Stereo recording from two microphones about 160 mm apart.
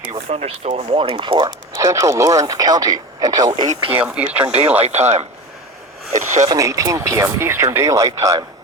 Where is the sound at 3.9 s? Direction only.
10° right (ahead or behind).